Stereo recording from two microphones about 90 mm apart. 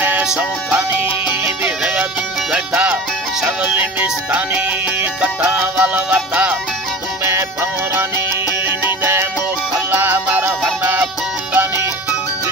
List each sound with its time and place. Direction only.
0.0 s music: 20° right (ahead or behind)
9.0 s music: 25° right (ahead or behind)